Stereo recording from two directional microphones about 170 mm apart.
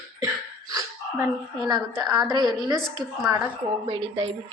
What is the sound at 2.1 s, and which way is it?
Speech, 25° right (ahead or behind).